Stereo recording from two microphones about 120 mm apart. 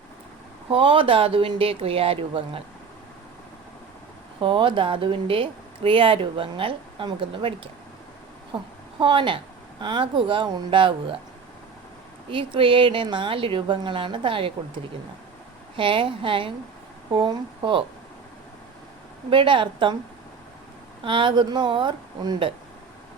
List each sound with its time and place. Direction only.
0.7 s speech: 45° right (ahead or behind)
4.4 s a woman's voice: 45° right (ahead or behind)
12.3 s speech: 45° right (ahead or behind)
15.7 s speech: 45° right (ahead or behind)
19.3 s speech: 45° right (ahead or behind)
21.0 s speech: 45° right (ahead or behind)